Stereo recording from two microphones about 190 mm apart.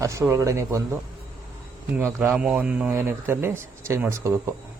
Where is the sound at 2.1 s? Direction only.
10° right (ahead or behind).